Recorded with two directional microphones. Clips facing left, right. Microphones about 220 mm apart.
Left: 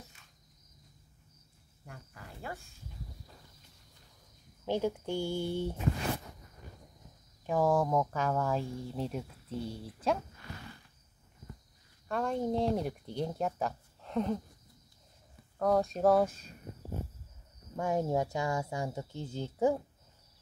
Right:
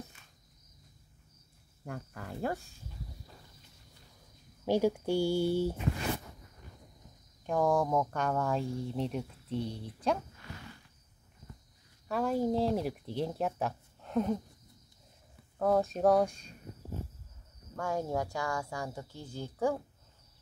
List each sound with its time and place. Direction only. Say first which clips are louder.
1.9 s cricket: right 9 dB; 55° right (ahead or behind)
4.6 s speech: right 4 dB; 10° right (ahead or behind)
7.4 s speech: even; 5° left (ahead or behind)
12.1 s speech: right 2 dB; 5° right (ahead or behind)
15.6 s speech: even; centre (ahead or behind)
17.7 s speech: left 3 dB; 20° left (ahead or behind)